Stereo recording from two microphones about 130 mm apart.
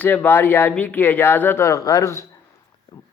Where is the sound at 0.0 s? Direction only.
15° left (ahead or behind).